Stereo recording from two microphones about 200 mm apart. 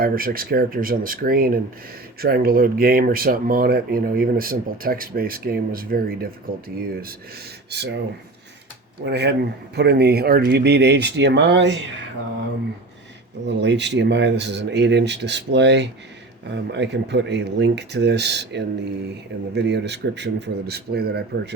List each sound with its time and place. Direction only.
0.0 s speech: 45° right (ahead or behind)
9.0 s speech: 55° right (ahead or behind)
13.4 s speech: 60° right (ahead or behind)